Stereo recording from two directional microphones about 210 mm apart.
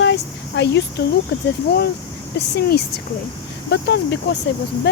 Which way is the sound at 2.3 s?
50° left (ahead or behind).